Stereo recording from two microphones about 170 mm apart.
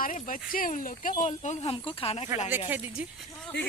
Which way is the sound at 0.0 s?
50° left (ahead or behind).